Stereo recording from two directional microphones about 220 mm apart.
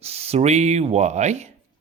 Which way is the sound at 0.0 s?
30° right (ahead or behind).